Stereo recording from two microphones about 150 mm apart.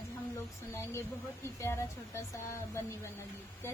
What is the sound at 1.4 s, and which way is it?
Speech, 20° left (ahead or behind).